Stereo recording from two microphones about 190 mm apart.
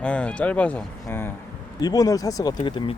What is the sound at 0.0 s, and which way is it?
Speech, 5° left (ahead or behind).